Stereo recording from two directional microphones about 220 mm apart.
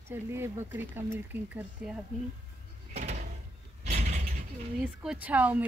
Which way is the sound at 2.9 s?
30° right (ahead or behind).